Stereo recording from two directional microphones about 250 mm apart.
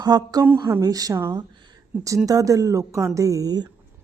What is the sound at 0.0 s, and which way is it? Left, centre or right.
Speech, centre.